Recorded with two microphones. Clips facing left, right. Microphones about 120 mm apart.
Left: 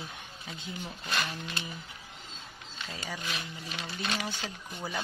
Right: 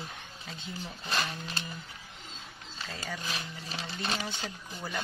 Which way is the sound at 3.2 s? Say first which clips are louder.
Even; 35° right (ahead or behind).